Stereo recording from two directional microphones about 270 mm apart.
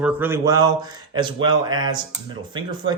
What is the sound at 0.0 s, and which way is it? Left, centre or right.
A man's voice, centre.